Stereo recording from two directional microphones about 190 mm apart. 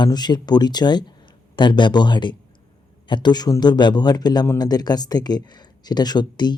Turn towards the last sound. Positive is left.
turn(degrees=25)  # may be behind; listen again after turning